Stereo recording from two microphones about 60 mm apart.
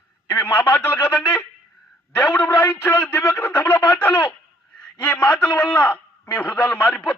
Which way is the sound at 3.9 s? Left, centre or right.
Left.